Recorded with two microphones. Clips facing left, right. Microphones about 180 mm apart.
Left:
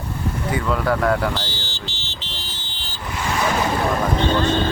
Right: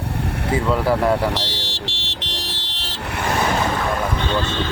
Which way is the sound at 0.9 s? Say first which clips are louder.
Right 1 dB; 30° right (ahead or behind).